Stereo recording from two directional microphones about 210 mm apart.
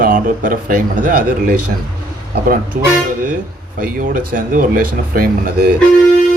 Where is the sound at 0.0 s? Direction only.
40° right (ahead or behind).